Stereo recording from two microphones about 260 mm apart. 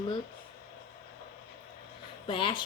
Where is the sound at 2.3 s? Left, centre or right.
Centre.